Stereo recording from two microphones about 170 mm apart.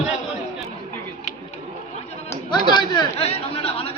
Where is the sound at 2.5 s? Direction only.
25° left (ahead or behind).